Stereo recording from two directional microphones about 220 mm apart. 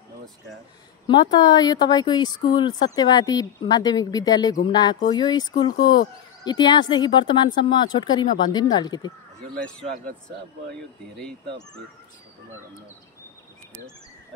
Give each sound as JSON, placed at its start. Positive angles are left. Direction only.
{"t": 1.0, "sound": "speech", "side_deg": 20}
{"t": 10.7, "sound": "speech", "side_deg": 5}